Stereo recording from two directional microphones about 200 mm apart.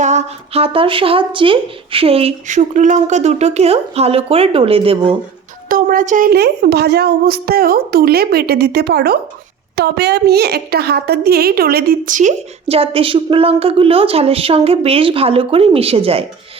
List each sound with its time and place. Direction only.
0.0 s a woman's voice: 35° right (ahead or behind)
5.6 s a woman's voice: 45° right (ahead or behind); by 16.2 s 30° right (ahead or behind)